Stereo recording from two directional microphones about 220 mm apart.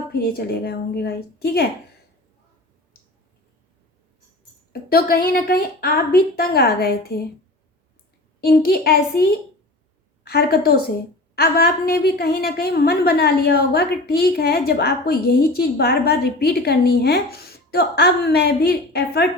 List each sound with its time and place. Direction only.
0.1 s a woman's voice: 45° left (ahead or behind)
4.7 s a woman's voice: 45° left (ahead or behind)
8.4 s a woman's voice: 45° left (ahead or behind)
10.2 s a woman's voice: 45° left (ahead or behind)